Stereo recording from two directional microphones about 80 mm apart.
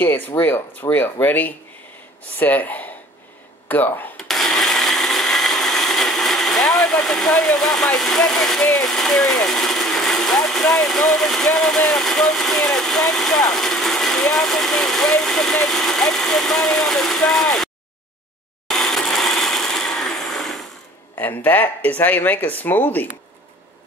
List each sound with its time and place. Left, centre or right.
0.0 s speech: left
4.2 s blender: centre
8.7 s speech: centre
18.7 s mechanisms: centre
21.2 s speech: left